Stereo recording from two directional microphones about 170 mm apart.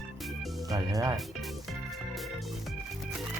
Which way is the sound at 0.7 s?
20° right (ahead or behind).